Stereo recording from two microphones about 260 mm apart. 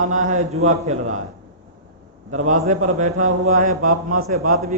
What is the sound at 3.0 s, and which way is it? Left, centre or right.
A man's voice, right.